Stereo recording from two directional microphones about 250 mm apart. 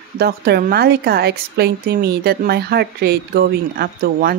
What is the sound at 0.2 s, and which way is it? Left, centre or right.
A woman's voice, right.